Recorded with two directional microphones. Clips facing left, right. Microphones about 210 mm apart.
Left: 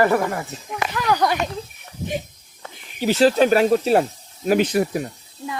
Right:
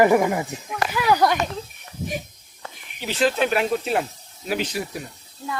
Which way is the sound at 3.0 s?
40° left (ahead or behind).